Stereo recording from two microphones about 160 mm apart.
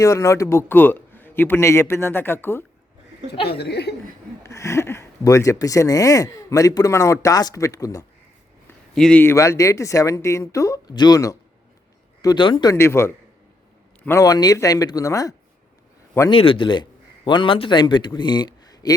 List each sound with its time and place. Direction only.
0.0 s a man's voice: 20° left (ahead or behind)
3.5 s speech: 90° left
4.4 s speech: 20° left (ahead or behind)
9.0 s speech: 5° left (ahead or behind); by 12.7 s 30° left (ahead or behind)
12.7 s a man's voice: 15° left (ahead or behind)
16.3 s a man's voice: 35° left (ahead or behind)